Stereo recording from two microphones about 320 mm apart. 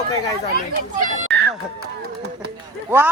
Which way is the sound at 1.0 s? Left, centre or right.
Right.